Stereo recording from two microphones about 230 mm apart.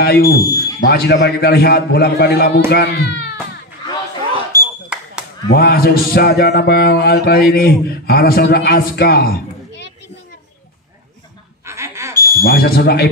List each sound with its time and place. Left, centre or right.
0.0 s a man's voice: left
4.5 s smoke detector: centre
5.5 s a man's voice: left
11.6 s a sound: centre
12.4 s a man's voice: left